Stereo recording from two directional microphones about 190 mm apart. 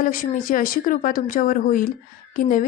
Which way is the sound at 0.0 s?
45° left (ahead or behind).